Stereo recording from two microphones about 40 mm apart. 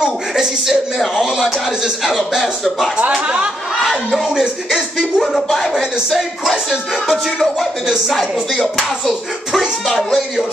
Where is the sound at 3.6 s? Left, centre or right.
Centre.